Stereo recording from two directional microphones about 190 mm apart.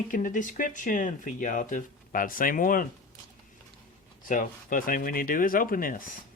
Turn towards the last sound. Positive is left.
turn(degrees=45)  # may be behind; listen again after turning